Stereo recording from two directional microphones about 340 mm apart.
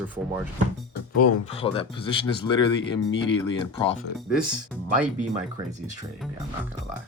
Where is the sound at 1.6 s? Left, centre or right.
Centre.